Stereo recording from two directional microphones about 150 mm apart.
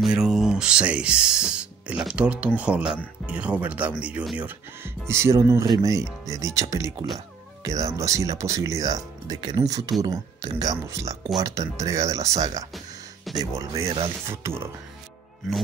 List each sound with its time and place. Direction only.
0.0 s speech: 5° right (ahead or behind)
4.5 s speech: 15° right (ahead or behind)
12.7 s music: centre (ahead or behind)
13.4 s speech: 20° right (ahead or behind)